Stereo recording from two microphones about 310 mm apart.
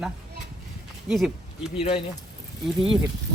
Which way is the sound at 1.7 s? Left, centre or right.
Centre.